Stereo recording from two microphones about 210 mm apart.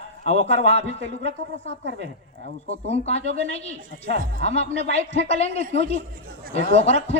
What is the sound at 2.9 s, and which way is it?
Speech, 30° left (ahead or behind).